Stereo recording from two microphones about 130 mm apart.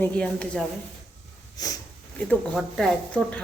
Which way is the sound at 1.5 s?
30° left (ahead or behind).